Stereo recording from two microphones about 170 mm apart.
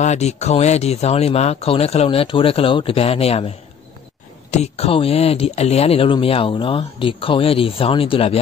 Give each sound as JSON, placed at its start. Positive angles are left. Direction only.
{"t": 0.0, "sound": "speech", "side_deg": 40}